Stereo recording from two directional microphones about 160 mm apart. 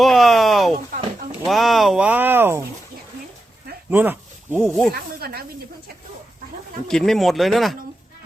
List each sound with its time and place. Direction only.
0.0 s a sound: centre (ahead or behind)
1.5 s speech: centre (ahead or behind)
3.8 s a sound: 10° right (ahead or behind)
4.7 s speech: 5° left (ahead or behind)
4.9 s speech: 75° right (ahead or behind)
6.8 s speech: 5° left (ahead or behind)